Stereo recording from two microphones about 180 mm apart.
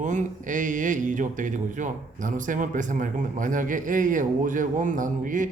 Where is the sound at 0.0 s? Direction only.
45° right (ahead or behind).